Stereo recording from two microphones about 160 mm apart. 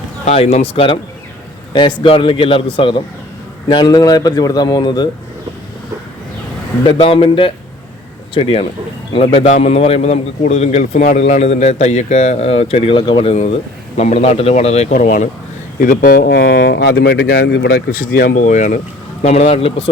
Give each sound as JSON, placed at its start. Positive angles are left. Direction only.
{"t": 0.3, "sound": "a man's voice", "side_deg": 40}
{"t": 6.8, "sound": "a man's voice", "side_deg": 35}
{"t": 13.9, "sound": "a man's voice", "side_deg": 45}